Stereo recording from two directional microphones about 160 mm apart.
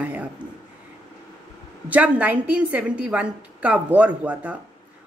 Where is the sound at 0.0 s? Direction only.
10° right (ahead or behind).